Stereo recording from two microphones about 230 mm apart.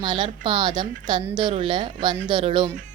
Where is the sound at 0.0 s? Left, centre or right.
Right.